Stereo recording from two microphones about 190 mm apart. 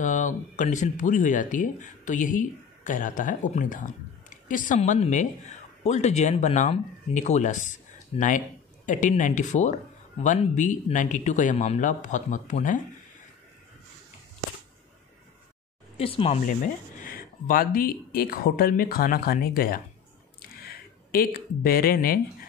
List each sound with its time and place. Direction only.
0.0 s speech: 40° left (ahead or behind)
16.0 s speech: 30° left (ahead or behind)
17.0 s speech: 50° left (ahead or behind)